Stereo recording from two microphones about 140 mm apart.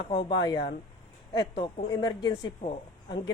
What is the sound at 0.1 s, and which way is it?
Speech, 35° left (ahead or behind).